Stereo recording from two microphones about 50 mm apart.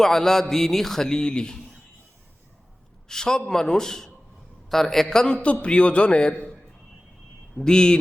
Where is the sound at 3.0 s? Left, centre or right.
Centre.